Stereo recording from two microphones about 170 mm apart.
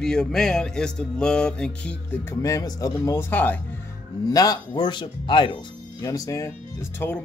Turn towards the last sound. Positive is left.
turn(degrees=15)  # may be behind; listen again after turning